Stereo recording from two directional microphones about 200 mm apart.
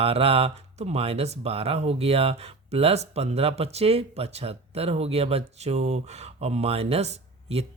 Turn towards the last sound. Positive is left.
turn(degrees=-30)  # may be behind; listen again after turning